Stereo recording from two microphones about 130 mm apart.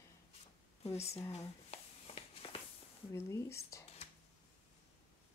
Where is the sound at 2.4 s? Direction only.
40° left (ahead or behind).